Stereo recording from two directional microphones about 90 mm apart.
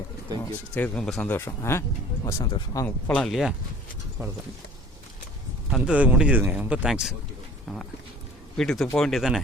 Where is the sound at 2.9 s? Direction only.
15° left (ahead or behind).